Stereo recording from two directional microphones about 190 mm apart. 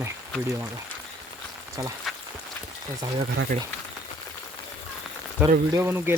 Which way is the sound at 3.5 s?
45° right (ahead or behind).